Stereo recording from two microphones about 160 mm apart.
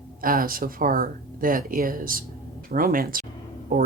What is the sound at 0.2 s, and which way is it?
Speech, 60° right (ahead or behind).